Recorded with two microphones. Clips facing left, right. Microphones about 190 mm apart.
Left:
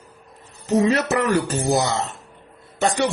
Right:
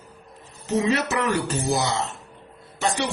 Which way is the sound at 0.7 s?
40° left (ahead or behind).